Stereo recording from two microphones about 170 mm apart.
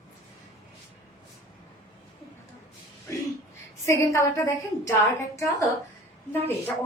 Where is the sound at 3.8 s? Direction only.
15° left (ahead or behind).